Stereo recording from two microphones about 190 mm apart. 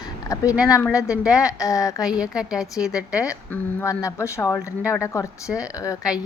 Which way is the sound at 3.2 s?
15° left (ahead or behind).